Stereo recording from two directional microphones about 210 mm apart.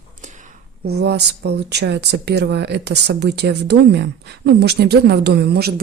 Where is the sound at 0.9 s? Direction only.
50° right (ahead or behind).